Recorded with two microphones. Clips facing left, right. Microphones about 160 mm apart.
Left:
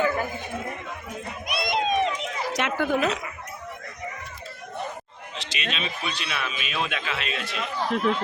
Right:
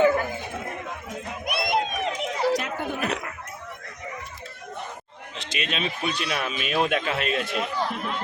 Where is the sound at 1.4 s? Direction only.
55° right (ahead or behind).